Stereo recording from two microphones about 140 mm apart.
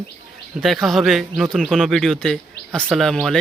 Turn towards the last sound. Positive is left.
turn(degrees=0)  # may be behind; listen again after turning